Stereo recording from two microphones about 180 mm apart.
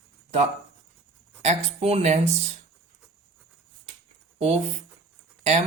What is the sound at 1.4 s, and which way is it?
Speech, 40° right (ahead or behind).